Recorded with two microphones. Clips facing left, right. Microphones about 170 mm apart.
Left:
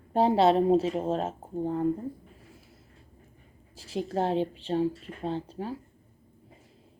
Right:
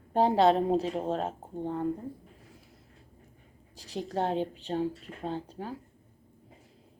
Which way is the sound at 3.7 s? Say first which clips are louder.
Left 4 dB; 40° right (ahead or behind).